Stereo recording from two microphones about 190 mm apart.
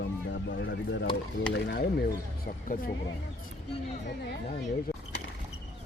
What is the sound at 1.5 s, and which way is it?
Speech, 60° left (ahead or behind).